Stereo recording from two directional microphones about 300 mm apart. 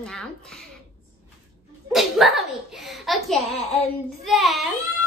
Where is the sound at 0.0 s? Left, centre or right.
Centre.